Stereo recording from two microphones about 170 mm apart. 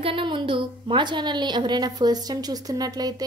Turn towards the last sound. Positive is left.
turn(degrees=-20)  # may be behind; listen again after turning